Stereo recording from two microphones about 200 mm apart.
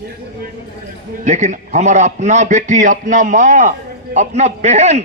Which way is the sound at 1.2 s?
35° right (ahead or behind).